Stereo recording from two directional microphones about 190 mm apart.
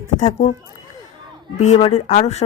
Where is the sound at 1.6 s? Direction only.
35° left (ahead or behind).